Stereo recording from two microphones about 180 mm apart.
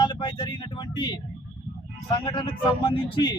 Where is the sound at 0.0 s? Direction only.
25° left (ahead or behind).